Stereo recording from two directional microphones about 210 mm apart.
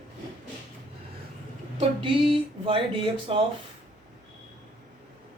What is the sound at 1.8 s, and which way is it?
Music, 25° right (ahead or behind).